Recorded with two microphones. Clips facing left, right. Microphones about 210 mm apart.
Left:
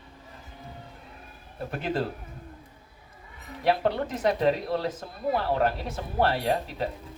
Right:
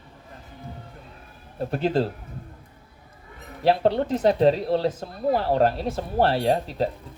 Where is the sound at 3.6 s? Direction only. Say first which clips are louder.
Right 5 dB; 30° right (ahead or behind).